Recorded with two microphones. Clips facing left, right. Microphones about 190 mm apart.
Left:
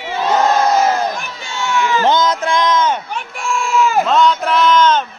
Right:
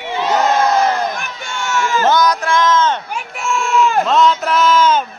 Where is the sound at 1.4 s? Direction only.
50° right (ahead or behind).